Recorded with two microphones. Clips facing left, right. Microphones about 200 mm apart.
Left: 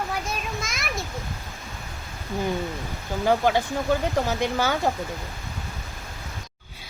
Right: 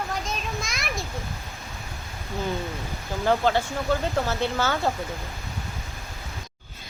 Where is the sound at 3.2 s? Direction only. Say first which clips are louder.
Left 1 dB; 15° left (ahead or behind).